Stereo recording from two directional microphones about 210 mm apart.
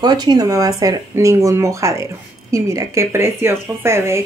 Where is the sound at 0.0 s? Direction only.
20° right (ahead or behind).